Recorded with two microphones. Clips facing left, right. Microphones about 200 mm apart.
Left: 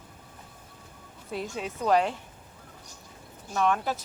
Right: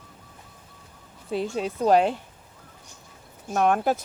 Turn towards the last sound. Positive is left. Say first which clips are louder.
# right 5 dB
turn(degrees=-50)  # may be behind; listen again after turning